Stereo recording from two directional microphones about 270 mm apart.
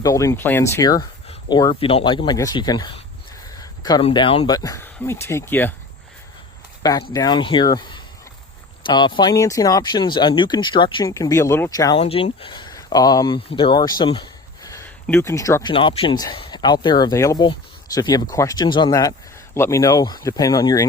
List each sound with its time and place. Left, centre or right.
0.0 s speech: centre
7.1 s speech: centre